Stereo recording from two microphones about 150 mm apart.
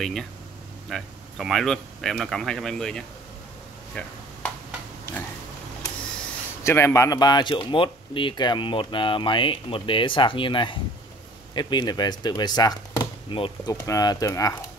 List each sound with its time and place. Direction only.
0.0 s speech: centre (ahead or behind)
6.6 s speech: 20° left (ahead or behind)